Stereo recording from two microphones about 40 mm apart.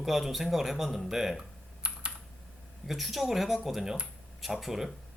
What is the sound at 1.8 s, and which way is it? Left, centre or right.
Computer keyboard, right.